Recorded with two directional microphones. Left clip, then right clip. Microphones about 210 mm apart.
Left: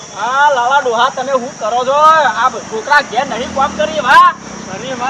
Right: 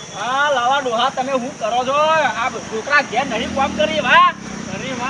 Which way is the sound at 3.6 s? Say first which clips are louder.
Left 4 dB; 20° left (ahead or behind).